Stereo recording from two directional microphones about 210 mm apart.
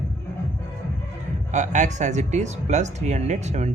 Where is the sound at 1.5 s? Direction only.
35° right (ahead or behind).